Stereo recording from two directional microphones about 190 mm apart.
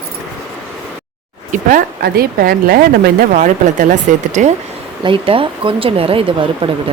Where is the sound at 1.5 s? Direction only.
45° right (ahead or behind).